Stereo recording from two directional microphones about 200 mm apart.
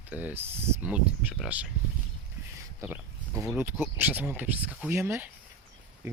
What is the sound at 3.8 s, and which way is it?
Speech, 10° right (ahead or behind).